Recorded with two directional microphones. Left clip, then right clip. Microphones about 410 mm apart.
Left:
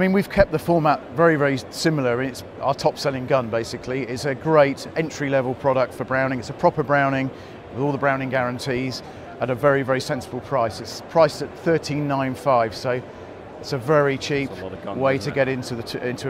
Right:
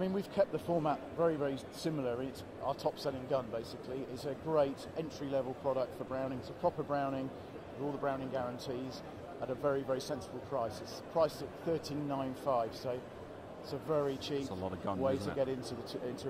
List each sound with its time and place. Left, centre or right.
0.0 s speech: left
1.9 s speech: left
2.6 s speech: left
8.0 s speech: left